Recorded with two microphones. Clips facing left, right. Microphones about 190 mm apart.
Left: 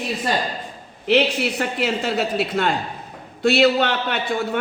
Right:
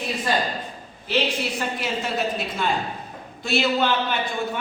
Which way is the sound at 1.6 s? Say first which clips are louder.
Left 5 dB; 70° left (ahead or behind).